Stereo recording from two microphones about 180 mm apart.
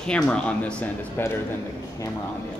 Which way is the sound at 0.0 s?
5° left (ahead or behind).